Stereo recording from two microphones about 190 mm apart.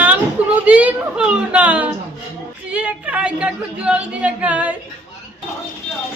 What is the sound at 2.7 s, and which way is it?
A woman's voice, 5° right (ahead or behind).